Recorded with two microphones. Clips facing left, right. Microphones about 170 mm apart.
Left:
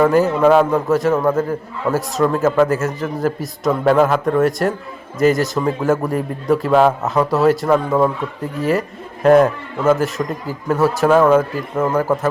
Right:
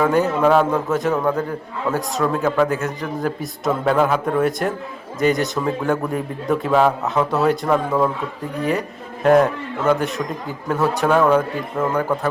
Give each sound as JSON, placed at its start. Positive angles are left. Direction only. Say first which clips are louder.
{"t": 0.0, "sound": "a man's voice", "louder": "left 3 dB", "side_deg": 0}
{"t": 7.9, "sound": "a man's voice", "louder": "left 3 dB", "side_deg": 15}
{"t": 9.2, "sound": "a man's voice", "louder": "left 3 dB", "side_deg": 0}